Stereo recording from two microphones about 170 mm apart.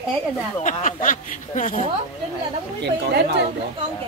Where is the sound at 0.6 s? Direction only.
50° left (ahead or behind).